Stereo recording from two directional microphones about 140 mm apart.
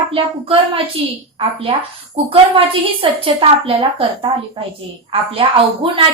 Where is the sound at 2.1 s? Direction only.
40° right (ahead or behind).